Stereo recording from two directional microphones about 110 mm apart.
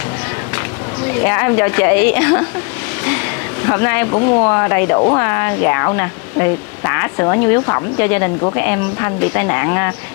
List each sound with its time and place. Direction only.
1.0 s speech: 25° left (ahead or behind)
3.6 s speech: 25° left (ahead or behind)